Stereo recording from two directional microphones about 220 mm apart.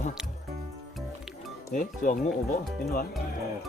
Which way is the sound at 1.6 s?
35° left (ahead or behind).